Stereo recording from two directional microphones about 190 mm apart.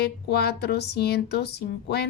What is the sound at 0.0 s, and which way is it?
A woman's voice, 55° left (ahead or behind).